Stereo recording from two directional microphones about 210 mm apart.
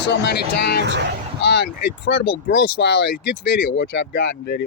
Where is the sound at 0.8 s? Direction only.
55° right (ahead or behind).